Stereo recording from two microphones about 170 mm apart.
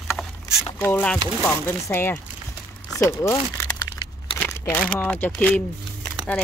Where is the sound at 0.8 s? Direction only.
10° left (ahead or behind).